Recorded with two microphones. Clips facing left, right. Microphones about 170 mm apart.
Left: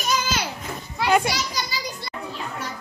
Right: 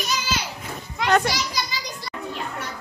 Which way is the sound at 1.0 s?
10° left (ahead or behind).